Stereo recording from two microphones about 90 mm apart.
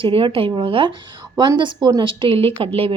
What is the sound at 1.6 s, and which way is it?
A woman's voice, 60° right (ahead or behind).